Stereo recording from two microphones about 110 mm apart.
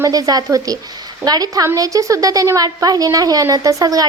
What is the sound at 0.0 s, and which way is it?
A woman's voice, 35° right (ahead or behind).